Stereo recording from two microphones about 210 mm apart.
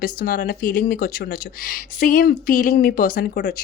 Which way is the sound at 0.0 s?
40° left (ahead or behind).